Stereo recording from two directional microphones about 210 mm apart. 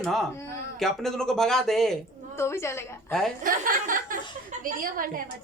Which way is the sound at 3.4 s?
40° right (ahead or behind).